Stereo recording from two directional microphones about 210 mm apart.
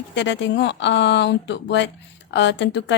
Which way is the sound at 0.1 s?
60° left (ahead or behind).